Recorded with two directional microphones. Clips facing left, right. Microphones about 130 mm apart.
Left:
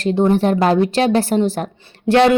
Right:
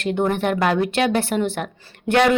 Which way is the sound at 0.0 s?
30° left (ahead or behind).